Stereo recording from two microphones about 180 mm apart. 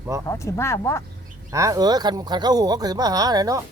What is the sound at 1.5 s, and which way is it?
Speech, 20° right (ahead or behind).